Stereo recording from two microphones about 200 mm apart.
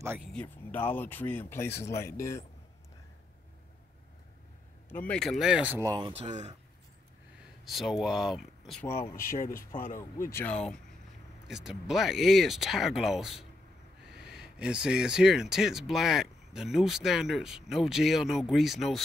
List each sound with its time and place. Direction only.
0.0 s speech: 10° right (ahead or behind)
0.3 s speech: 5° left (ahead or behind)
4.8 s speech: 10° left (ahead or behind); by 6.3 s 25° right (ahead or behind)
7.6 s speech: centre (ahead or behind)
8.8 s speech: 10° left (ahead or behind)
9.1 s speech: 45° left (ahead or behind)
9.9 s speech: 15° left (ahead or behind)